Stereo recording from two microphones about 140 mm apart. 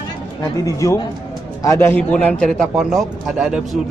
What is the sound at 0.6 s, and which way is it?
A man's voice, 20° left (ahead or behind).